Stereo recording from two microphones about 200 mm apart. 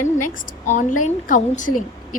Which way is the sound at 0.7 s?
40° left (ahead or behind).